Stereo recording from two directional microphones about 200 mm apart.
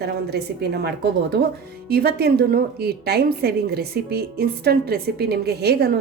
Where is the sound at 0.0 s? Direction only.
55° right (ahead or behind).